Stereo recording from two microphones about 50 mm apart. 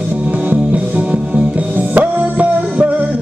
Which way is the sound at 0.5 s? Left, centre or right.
Right.